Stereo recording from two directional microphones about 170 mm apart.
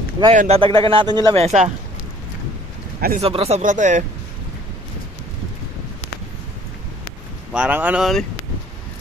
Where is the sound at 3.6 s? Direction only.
45° right (ahead or behind).